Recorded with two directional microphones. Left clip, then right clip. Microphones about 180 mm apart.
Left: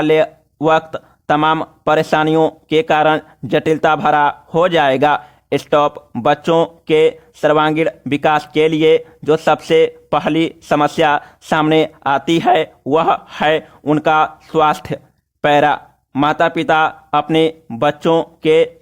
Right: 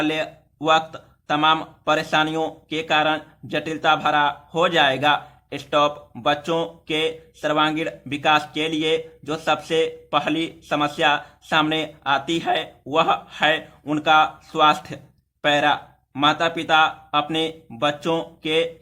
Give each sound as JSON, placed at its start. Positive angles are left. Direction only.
{"t": 0.0, "sound": "speech", "side_deg": 50}